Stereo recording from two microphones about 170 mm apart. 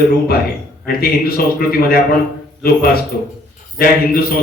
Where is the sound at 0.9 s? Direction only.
60° left (ahead or behind).